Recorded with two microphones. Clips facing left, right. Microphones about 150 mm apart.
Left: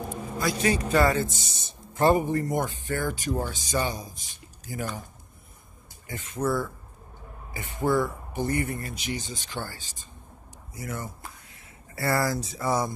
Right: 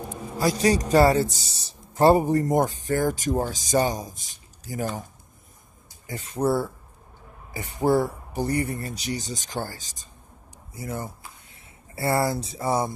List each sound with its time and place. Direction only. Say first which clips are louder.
0.4 s a man's voice: right 4 dB; 35° right (ahead or behind)
6.0 s a man's voice: right 4 dB; 35° right (ahead or behind)
10.7 s speech: right 3 dB; 25° right (ahead or behind)